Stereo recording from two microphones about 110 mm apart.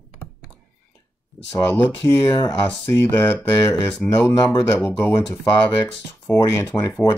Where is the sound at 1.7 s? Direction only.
25° left (ahead or behind).